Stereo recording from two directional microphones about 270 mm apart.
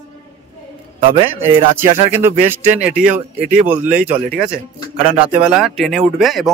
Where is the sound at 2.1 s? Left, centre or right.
Centre.